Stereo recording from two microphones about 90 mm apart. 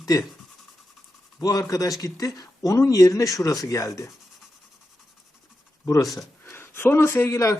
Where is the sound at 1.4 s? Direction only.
45° left (ahead or behind).